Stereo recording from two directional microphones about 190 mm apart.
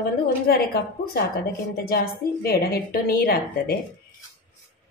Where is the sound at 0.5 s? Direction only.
55° left (ahead or behind).